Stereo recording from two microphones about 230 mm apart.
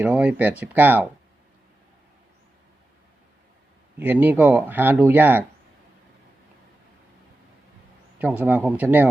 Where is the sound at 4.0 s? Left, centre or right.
Centre.